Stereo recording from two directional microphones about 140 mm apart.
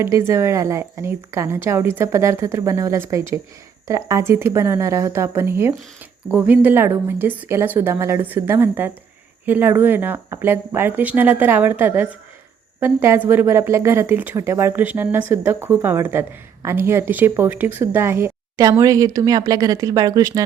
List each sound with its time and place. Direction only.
0.0 s speech: 20° right (ahead or behind)